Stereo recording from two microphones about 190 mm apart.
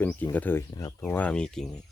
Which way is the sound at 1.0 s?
10° left (ahead or behind).